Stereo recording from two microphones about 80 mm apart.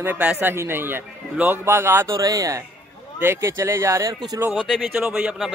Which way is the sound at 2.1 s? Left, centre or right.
Right.